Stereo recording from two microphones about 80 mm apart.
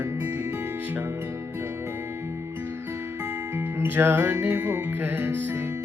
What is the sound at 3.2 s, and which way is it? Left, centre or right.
Music, right.